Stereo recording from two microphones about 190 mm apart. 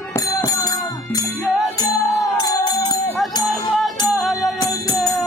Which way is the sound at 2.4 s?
20° left (ahead or behind).